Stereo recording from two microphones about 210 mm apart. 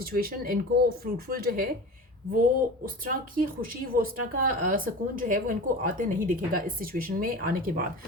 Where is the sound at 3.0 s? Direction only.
45° right (ahead or behind).